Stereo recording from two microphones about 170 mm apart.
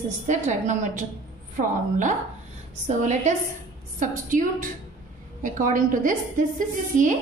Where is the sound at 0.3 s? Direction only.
45° right (ahead or behind).